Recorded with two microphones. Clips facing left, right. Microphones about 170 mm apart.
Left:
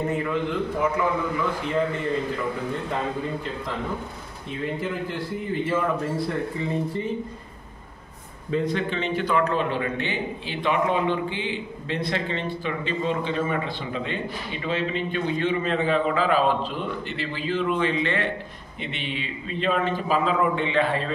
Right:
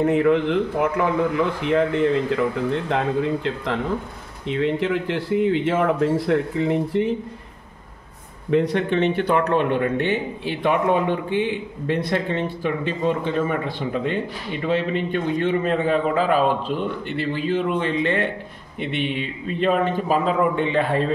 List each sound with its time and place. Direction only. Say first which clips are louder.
0.0 s a man's voice: right 8 dB; 65° right (ahead or behind)
8.5 s a man's voice: right 5 dB; 65° right (ahead or behind); by 21.1 s 50° right (ahead or behind)